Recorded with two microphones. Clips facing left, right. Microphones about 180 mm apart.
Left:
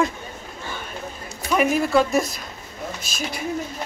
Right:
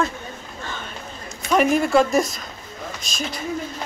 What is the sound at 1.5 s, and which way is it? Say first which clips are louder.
Speech: right 2 dB; centre (ahead or behind).